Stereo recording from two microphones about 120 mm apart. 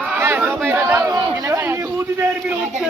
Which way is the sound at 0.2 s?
20° right (ahead or behind).